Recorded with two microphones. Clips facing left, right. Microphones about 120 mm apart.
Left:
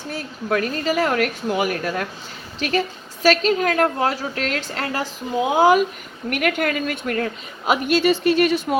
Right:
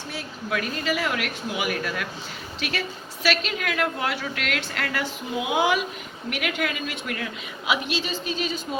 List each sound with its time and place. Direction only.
0.1 s a woman's voice: 45° left (ahead or behind); by 8.6 s 65° left (ahead or behind)